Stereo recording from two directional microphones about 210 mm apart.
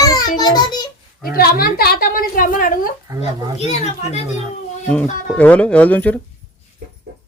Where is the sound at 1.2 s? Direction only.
45° left (ahead or behind).